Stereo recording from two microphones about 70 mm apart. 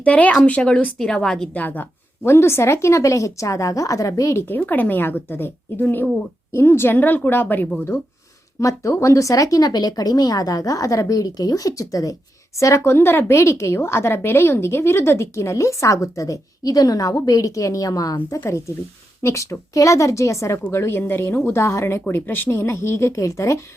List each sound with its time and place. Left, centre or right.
0.0 s a woman's voice: centre
0.9 s a woman's voice: centre
1.5 s a woman's voice: left
2.2 s a woman's voice: left
4.4 s a woman's voice: left
6.9 s a woman's voice: left
8.6 s a woman's voice: left
19.2 s a woman's voice: left
20.7 s speech: left
22.0 s speech: left